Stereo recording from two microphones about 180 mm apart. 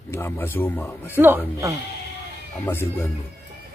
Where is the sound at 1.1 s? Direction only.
10° right (ahead or behind).